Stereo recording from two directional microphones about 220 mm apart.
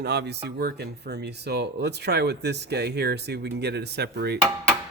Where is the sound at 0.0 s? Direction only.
50° right (ahead or behind).